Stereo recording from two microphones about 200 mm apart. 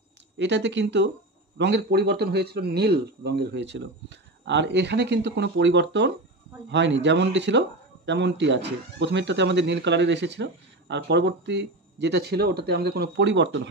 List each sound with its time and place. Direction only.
0.4 s speech: 60° right (ahead or behind)